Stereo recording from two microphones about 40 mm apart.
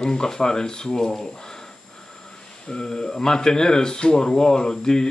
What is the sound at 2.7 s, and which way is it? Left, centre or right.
Speech, centre.